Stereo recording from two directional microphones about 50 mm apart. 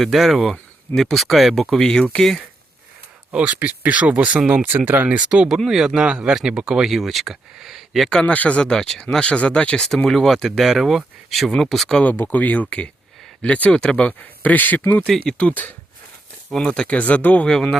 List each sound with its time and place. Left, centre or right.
0.0 s speech: centre
1.7 s speech: centre
3.3 s speech: right
4.5 s speech: right
5.6 s speech: centre
6.1 s speech: right
6.9 s speech: centre
8.1 s speech: left
8.6 s speech: centre
10.1 s speech: centre
12.1 s speech: left; by 14.1 s centre
14.1 s speech: left
16.6 s speech: centre